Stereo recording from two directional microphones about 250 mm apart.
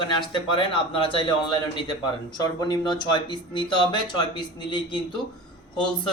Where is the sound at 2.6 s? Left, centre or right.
Centre.